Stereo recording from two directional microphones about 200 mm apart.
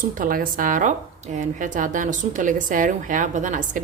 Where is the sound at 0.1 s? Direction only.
45° right (ahead or behind).